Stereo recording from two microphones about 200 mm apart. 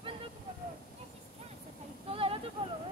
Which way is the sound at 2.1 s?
30° right (ahead or behind).